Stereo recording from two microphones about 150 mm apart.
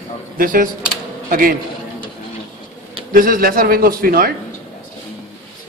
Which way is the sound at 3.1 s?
70° right (ahead or behind).